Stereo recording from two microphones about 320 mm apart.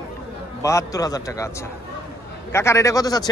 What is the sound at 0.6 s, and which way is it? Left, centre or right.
Speech, centre.